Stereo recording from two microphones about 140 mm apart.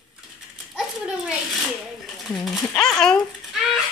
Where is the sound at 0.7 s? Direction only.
5° right (ahead or behind).